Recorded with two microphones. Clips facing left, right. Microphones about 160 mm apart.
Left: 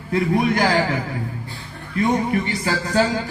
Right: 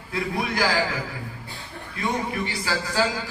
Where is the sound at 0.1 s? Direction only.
45° left (ahead or behind).